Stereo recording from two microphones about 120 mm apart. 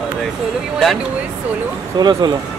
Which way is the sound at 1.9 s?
35° right (ahead or behind).